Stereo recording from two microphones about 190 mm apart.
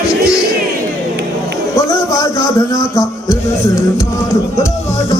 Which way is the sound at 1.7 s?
20° left (ahead or behind).